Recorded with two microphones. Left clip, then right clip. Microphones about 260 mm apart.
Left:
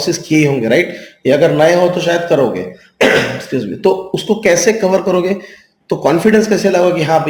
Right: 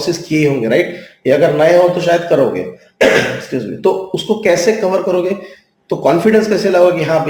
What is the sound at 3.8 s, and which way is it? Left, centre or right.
Speech, left.